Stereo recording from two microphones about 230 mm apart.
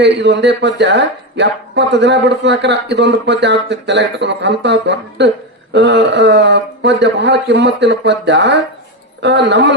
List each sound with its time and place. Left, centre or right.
0.0 s speech: right